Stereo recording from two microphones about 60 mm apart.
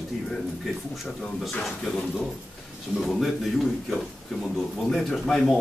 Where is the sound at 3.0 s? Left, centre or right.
Centre.